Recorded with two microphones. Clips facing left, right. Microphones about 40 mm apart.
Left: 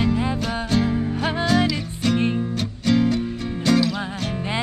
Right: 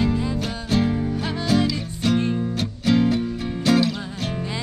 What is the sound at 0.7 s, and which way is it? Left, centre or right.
Music, centre.